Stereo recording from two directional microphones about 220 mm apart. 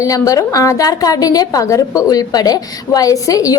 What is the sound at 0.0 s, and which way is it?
A woman's voice, 15° left (ahead or behind).